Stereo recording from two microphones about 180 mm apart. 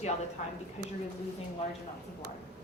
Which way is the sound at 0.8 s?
35° left (ahead or behind).